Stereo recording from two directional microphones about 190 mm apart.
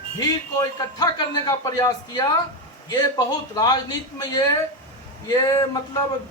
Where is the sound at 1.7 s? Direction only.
20° left (ahead or behind).